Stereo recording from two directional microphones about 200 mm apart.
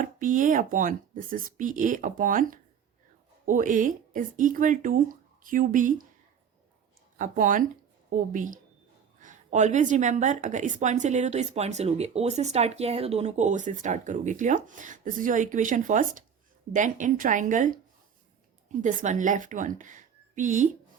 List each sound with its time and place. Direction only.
0.0 s a woman's voice: 40° right (ahead or behind)
7.2 s a woman's voice: 40° right (ahead or behind)